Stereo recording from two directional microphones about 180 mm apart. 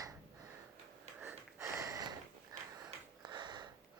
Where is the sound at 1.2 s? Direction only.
15° right (ahead or behind).